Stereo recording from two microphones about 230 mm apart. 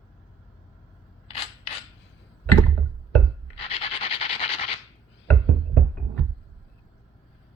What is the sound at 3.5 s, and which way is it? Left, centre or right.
Rub, left.